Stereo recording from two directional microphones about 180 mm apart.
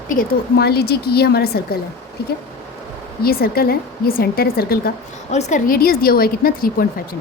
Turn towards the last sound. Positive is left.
turn(degrees=55)  # may be behind; listen again after turning